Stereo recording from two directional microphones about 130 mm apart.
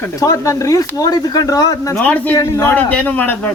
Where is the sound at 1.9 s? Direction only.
15° left (ahead or behind).